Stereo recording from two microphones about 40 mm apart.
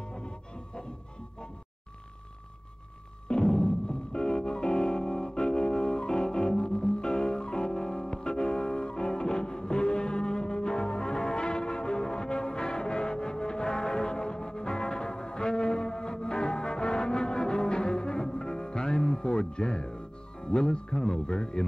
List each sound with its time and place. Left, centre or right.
3.3 s music: left